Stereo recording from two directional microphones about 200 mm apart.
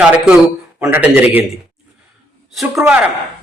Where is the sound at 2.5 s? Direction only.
Centre (ahead or behind).